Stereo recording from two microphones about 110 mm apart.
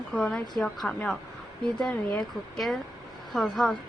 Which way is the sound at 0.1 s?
5° left (ahead or behind).